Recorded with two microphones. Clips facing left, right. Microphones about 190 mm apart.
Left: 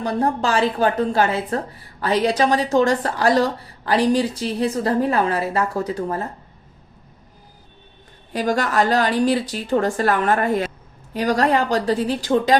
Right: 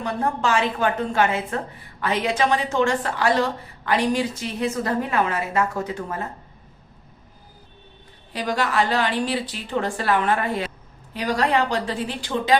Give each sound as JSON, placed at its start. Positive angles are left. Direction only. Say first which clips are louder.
{"t": 0.0, "sound": "a woman's voice", "louder": "left 3 dB", "side_deg": 35}
{"t": 8.3, "sound": "a woman's voice", "louder": "left 4 dB", "side_deg": 45}